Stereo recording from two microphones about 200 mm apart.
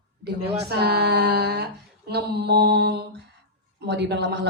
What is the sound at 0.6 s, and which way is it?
A woman's voice, 55° right (ahead or behind).